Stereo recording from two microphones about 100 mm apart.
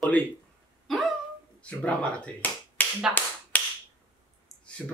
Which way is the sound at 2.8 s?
15° left (ahead or behind).